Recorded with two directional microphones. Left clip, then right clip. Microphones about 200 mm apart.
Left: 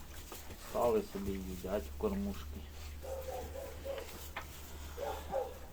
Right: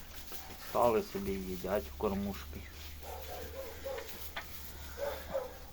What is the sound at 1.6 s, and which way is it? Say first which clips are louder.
Speech: right 3 dB; 30° right (ahead or behind).